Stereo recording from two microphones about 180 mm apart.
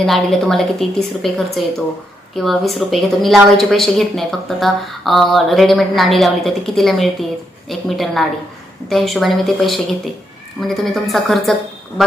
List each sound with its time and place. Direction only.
0.0 s a woman's voice: centre (ahead or behind)